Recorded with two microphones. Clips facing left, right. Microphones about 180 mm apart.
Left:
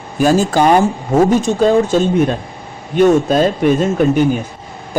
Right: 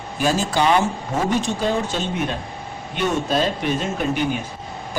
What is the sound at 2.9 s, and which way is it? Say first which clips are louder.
Speech: left 10 dB; 45° left (ahead or behind).